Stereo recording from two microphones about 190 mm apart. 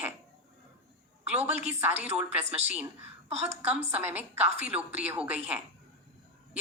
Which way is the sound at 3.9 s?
10° right (ahead or behind).